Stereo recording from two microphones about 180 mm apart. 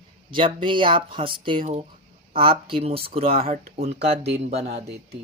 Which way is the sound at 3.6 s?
65° right (ahead or behind).